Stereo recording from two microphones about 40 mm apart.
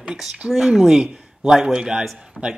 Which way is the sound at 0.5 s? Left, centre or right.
Centre.